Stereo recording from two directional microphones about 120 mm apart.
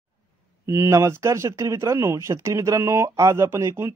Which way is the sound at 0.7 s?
25° right (ahead or behind).